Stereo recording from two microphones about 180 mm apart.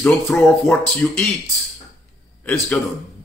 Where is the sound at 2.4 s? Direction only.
10° left (ahead or behind).